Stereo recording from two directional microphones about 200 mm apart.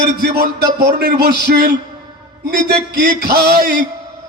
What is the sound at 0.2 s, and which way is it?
Speech, 55° right (ahead or behind).